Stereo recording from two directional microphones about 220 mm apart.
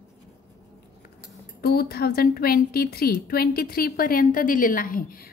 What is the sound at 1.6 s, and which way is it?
A woman's voice, 45° left (ahead or behind).